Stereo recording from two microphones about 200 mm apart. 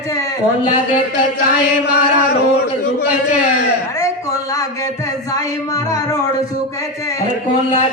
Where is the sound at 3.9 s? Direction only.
15° left (ahead or behind).